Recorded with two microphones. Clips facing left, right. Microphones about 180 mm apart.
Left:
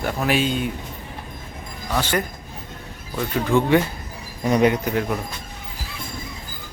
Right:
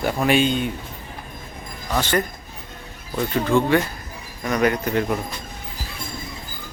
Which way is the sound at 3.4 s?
15° left (ahead or behind).